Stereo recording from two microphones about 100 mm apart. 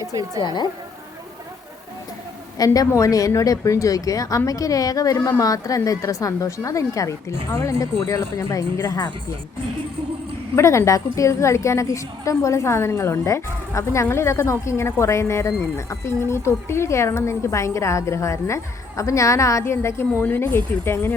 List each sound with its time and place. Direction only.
0.3 s a woman's voice: 50° left (ahead or behind)
2.6 s a woman's voice: 35° left (ahead or behind)
10.5 s a woman's voice: 30° left (ahead or behind)